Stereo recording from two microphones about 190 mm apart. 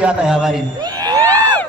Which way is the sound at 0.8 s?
20° right (ahead or behind).